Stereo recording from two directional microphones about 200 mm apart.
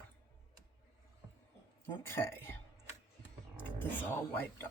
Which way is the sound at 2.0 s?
10° left (ahead or behind).